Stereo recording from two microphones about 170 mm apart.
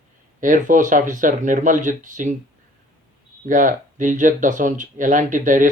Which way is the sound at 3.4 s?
50° right (ahead or behind).